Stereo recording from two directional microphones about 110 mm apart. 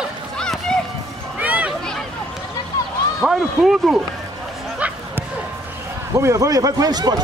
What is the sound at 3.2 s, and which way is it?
Speech, 5° right (ahead or behind).